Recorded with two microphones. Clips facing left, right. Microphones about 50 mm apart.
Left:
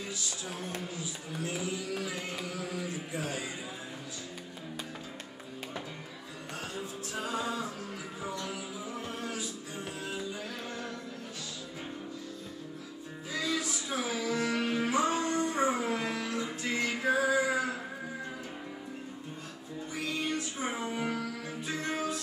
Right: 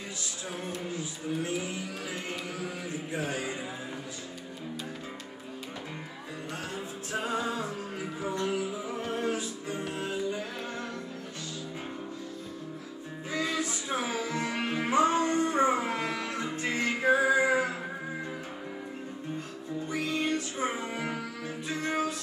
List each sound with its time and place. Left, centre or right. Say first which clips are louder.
1.4 s speech: left 2 dB; right
3.2 s speech: right 3 dB; right
7.2 s music: right 3 dB; right
13.3 s music: right 2 dB; right
19.9 s music: right 4 dB; right
20.9 s music: even; right